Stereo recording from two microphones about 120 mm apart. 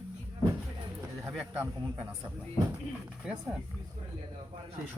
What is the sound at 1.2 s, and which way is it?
Speech, 20° right (ahead or behind).